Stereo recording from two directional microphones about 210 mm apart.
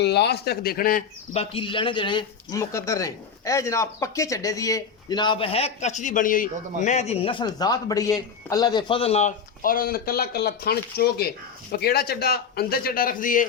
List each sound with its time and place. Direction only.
0.0 s a man's voice: 55° left (ahead or behind)